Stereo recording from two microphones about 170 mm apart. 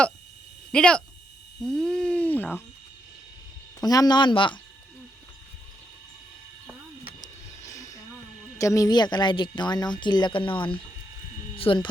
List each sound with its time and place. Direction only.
0.7 s speech: 5° left (ahead or behind)
3.8 s speech: 20° left (ahead or behind)
7.2 s a sound: 20° left (ahead or behind)
8.5 s speech: 20° left (ahead or behind)